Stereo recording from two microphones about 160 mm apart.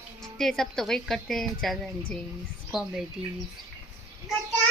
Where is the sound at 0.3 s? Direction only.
Centre (ahead or behind).